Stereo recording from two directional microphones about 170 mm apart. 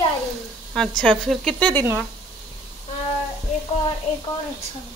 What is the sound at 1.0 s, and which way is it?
Speech, 5° left (ahead or behind).